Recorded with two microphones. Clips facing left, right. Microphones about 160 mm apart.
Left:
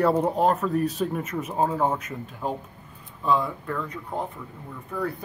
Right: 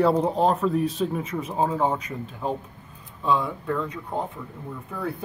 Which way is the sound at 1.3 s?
10° left (ahead or behind).